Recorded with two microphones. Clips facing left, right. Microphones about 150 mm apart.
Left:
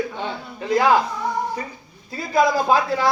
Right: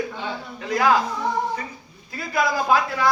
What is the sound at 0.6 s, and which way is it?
Speech, 25° left (ahead or behind).